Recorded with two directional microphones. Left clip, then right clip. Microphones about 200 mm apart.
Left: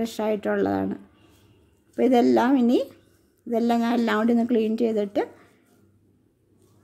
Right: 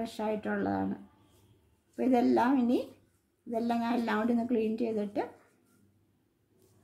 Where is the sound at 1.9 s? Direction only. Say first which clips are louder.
Left 8 dB; 45° left (ahead or behind).